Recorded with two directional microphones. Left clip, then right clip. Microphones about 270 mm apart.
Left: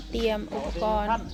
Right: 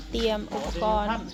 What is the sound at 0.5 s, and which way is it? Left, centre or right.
Speech, right.